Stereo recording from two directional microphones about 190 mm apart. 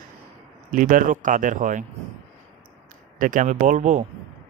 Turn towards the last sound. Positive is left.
turn(degrees=-40)  # may be behind; listen again after turning